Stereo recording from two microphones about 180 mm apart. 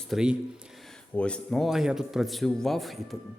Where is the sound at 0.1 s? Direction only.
5° right (ahead or behind).